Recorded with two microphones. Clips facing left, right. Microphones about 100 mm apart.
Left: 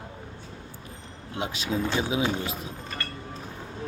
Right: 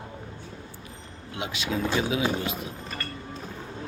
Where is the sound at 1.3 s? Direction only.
35° left (ahead or behind).